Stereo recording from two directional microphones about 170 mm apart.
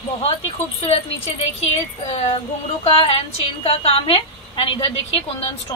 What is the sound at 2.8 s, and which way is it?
A woman's voice, 35° left (ahead or behind).